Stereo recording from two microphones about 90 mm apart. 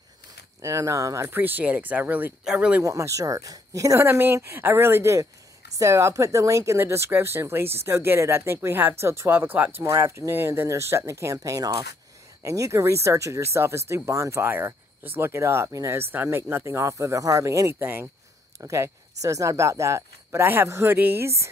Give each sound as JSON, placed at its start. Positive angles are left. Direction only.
{"t": 0.6, "sound": "speech", "side_deg": -35}
{"t": 2.8, "sound": "speech", "side_deg": -35}